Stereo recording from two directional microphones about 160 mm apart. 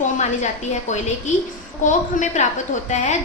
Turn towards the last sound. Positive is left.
turn(degrees=50)  # may be behind; listen again after turning